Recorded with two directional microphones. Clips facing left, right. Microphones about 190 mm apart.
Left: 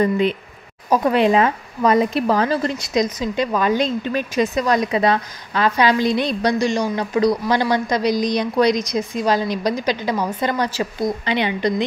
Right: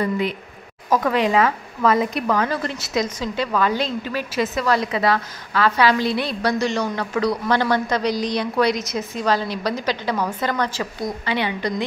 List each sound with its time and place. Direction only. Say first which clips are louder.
0.8 s a woman's voice: left 3 dB; 15° left (ahead or behind)
2.9 s a woman's voice: left 2 dB; 15° left (ahead or behind)